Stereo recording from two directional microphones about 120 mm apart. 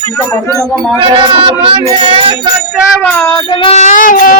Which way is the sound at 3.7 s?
85° left.